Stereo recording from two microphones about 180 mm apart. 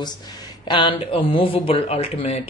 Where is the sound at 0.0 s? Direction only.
25° left (ahead or behind).